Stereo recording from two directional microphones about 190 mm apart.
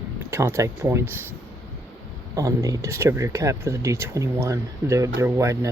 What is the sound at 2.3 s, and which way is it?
Speech, 20° right (ahead or behind).